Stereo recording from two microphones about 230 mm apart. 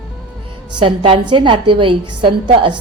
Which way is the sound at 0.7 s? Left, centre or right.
Right.